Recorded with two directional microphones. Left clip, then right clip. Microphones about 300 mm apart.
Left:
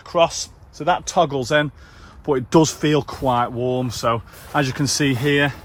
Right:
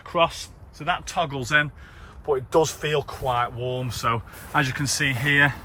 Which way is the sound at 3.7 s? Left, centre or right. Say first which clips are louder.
Left 2 dB; centre.